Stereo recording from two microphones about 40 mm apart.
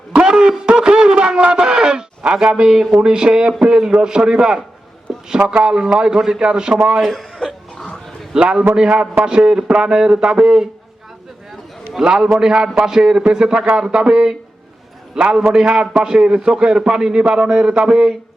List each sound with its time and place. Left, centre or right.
0.2 s a sound: right
3.0 s a man's voice: centre
7.0 s a man's voice: centre
8.4 s a man's voice: right
11.9 s a man's voice: centre